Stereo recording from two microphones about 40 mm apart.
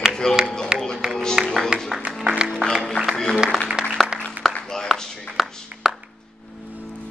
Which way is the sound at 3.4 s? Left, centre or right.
Centre.